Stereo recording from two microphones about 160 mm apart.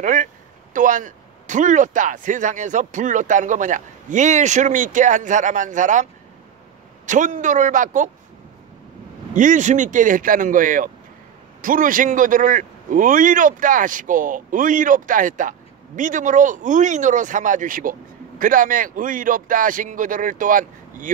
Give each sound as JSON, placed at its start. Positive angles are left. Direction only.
{"t": 0.0, "sound": "speech", "side_deg": -55}
{"t": 7.1, "sound": "speech", "side_deg": -50}
{"t": 9.3, "sound": "a man's voice", "side_deg": -55}